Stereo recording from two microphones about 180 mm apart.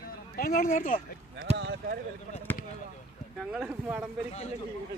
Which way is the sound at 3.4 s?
5° right (ahead or behind).